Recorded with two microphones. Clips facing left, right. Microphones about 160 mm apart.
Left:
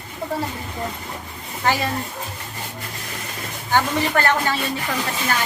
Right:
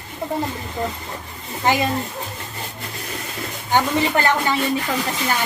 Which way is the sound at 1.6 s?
15° right (ahead or behind).